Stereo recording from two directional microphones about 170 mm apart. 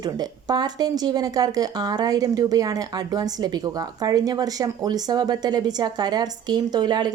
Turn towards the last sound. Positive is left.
turn(degrees=-25)  # may be behind; listen again after turning